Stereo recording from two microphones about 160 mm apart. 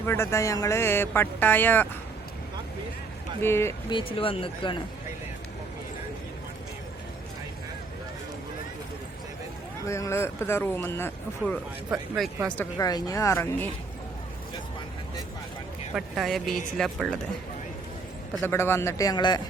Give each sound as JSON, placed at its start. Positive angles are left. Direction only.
{"t": 0.0, "sound": "speech", "side_deg": 15}
{"t": 3.4, "sound": "speech", "side_deg": 15}
{"t": 3.8, "sound": "speech", "side_deg": 30}
{"t": 9.8, "sound": "speech", "side_deg": 20}
{"t": 11.9, "sound": "speech", "side_deg": 0}
{"t": 12.8, "sound": "speech", "side_deg": 25}
{"t": 16.0, "sound": "speech", "side_deg": 0}
{"t": 18.4, "sound": "speech", "side_deg": 15}